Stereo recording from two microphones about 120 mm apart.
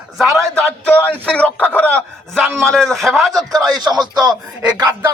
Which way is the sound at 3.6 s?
35° right (ahead or behind).